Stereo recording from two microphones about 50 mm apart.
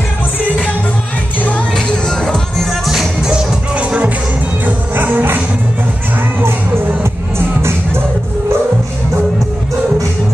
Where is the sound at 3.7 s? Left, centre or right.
Right.